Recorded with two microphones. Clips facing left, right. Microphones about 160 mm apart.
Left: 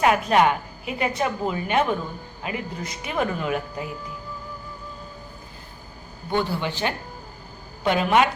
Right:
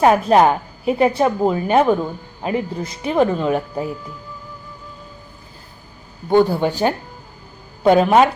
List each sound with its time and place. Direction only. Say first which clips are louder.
0.0 s a woman's voice: right 6 dB; 35° right (ahead or behind)
6.3 s a woman's voice: right 10 dB; 45° right (ahead or behind)